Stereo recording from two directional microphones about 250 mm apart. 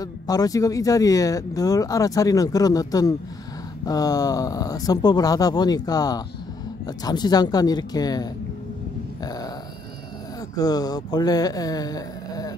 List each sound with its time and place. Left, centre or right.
0.0 s speech: centre
9.2 s a sound: centre
10.5 s speech: centre